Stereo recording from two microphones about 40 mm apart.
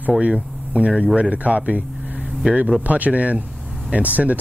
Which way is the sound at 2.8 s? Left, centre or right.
Right.